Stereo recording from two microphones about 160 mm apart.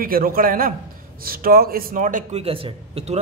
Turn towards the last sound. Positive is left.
turn(degrees=-40)  # may be behind; listen again after turning